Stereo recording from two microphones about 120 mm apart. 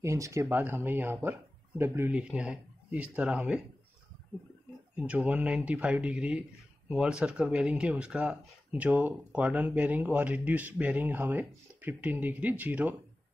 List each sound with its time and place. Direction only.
0.0 s speech: 25° right (ahead or behind)
2.1 s speech: 5° right (ahead or behind)
4.9 s speech: 10° right (ahead or behind)